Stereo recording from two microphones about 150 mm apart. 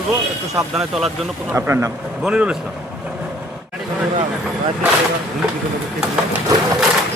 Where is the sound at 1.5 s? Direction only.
15° right (ahead or behind).